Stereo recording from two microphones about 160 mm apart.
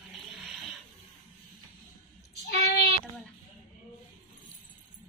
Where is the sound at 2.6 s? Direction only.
90° left.